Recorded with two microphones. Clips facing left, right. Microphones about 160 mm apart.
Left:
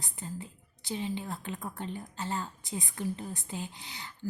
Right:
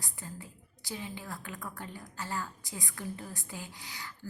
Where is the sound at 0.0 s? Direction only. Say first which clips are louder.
Left 4 dB; 20° left (ahead or behind).